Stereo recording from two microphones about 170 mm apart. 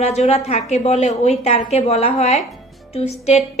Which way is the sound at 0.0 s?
40° left (ahead or behind).